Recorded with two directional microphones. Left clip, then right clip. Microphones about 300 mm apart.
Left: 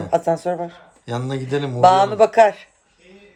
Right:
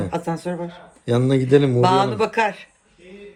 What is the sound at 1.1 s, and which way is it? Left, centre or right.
Speech, centre.